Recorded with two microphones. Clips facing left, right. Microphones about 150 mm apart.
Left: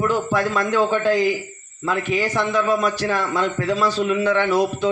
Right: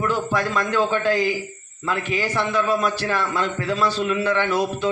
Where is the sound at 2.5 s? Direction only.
15° left (ahead or behind).